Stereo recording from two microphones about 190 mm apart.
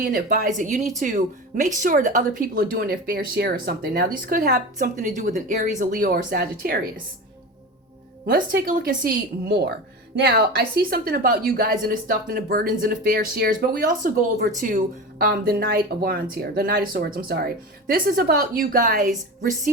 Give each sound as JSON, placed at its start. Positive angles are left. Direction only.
{"t": 0.0, "sound": "a woman's voice", "side_deg": -50}
{"t": 8.3, "sound": "a woman's voice", "side_deg": -50}